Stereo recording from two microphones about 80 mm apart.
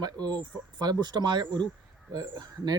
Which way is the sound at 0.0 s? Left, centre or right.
Right.